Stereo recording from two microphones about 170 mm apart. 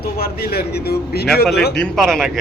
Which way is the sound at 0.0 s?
65° left (ahead or behind).